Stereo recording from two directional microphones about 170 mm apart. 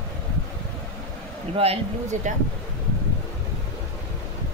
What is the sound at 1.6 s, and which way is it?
Speech, 40° right (ahead or behind).